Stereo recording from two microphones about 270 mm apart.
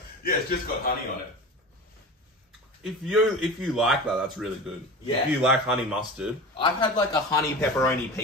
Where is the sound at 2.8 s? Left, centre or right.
Centre.